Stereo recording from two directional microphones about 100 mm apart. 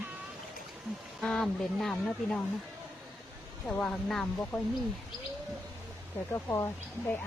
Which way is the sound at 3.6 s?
10° left (ahead or behind).